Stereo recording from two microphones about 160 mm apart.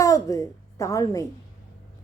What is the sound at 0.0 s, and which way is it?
A woman's voice, 20° left (ahead or behind).